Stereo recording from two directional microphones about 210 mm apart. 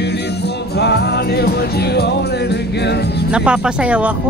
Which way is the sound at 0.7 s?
50° left (ahead or behind).